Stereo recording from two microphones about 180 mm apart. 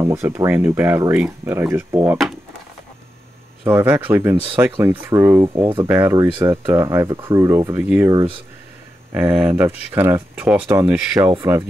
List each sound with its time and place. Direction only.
0.0 s speech: 15° right (ahead or behind)
2.0 s speech: 5° right (ahead or behind)
3.8 s speech: 10° right (ahead or behind)
8.1 s speech: 20° right (ahead or behind)
9.1 s speech: 5° right (ahead or behind)